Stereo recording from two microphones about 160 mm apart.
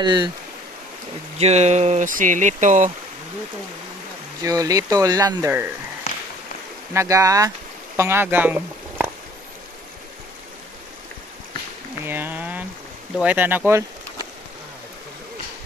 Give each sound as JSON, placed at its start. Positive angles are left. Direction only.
{"t": 0.0, "sound": "speech", "side_deg": -30}
{"t": 1.4, "sound": "speech", "side_deg": -45}
{"t": 4.4, "sound": "speech", "side_deg": -20}
{"t": 6.9, "sound": "speech", "side_deg": -20}
{"t": 12.0, "sound": "a sound", "side_deg": -15}
{"t": 13.2, "sound": "speech", "side_deg": -10}